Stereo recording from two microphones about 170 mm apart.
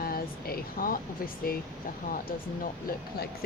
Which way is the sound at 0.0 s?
60° left (ahead or behind).